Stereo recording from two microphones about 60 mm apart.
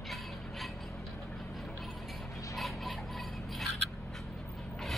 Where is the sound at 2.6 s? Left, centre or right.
Centre.